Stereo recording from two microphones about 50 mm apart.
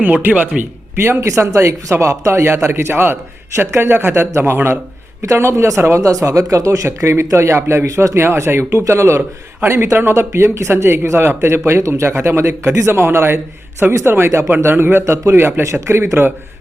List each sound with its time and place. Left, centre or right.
0.2 s speech: right
1.4 s speech: right
5.2 s speech: right
6.1 s speech: right
9.6 s speech: right
11.8 s speech: right
13.0 s speech: right
15.0 s speech: right
15.6 s speech: right